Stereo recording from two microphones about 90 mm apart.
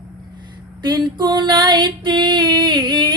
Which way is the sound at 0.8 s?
55° right (ahead or behind).